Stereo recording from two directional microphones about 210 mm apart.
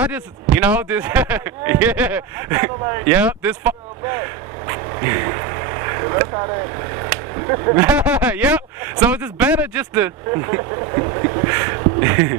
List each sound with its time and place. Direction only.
0.0 s speech: 5° right (ahead or behind)
7.9 s speech: 5° right (ahead or behind)